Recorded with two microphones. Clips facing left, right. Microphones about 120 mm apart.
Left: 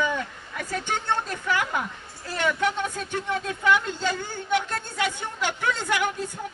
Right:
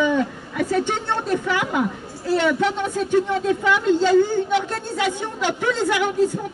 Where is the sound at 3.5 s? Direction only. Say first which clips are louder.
Right 4 dB; 40° right (ahead or behind).